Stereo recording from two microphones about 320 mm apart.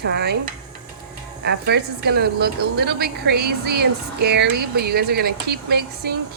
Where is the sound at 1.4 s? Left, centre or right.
Right.